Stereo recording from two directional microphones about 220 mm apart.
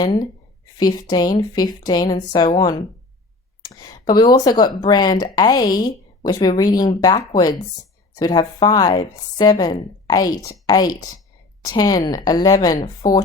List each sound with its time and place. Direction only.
0.0 s speech: 15° left (ahead or behind)